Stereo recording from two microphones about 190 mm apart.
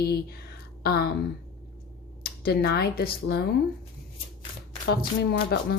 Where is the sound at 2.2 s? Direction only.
55° left (ahead or behind).